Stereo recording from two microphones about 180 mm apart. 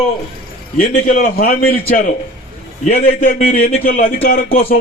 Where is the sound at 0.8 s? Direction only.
45° left (ahead or behind).